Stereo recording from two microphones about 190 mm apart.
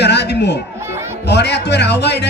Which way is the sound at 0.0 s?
60° left (ahead or behind).